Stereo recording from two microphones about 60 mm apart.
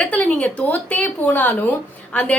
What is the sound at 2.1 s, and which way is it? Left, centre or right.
Speech, centre.